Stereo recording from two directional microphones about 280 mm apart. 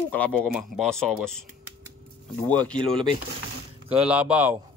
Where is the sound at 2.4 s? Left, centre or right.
Centre.